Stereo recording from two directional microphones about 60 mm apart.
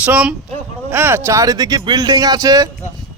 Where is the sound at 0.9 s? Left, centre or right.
Right.